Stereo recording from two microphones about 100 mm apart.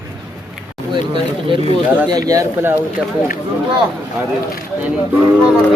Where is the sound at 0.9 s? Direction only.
60° right (ahead or behind).